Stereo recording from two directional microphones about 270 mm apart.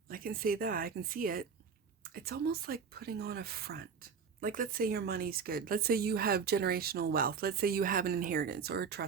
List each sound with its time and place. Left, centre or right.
0.1 s speech: right